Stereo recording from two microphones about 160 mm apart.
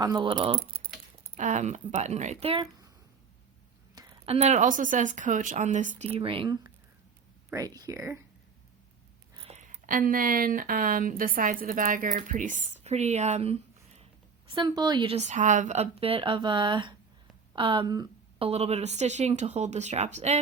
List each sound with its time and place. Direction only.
0.0 s a woman's voice: 20° right (ahead or behind)
0.3 s speech: 30° right (ahead or behind)
1.4 s speech: 50° right (ahead or behind)
4.3 s speech: 45° right (ahead or behind)
6.1 s speech: 35° right (ahead or behind)
7.8 s speech: 20° right (ahead or behind)
9.4 s speech: 45° right (ahead or behind)
14.5 s a woman's voice: 25° right (ahead or behind)
15.1 s speech: 45° right (ahead or behind); by 18.4 s 30° right (ahead or behind)
18.4 s speech: 40° right (ahead or behind)